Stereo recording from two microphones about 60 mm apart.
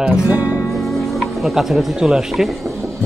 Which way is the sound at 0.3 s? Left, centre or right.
Right.